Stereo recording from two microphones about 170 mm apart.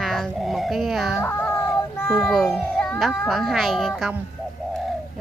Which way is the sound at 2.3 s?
Centre (ahead or behind).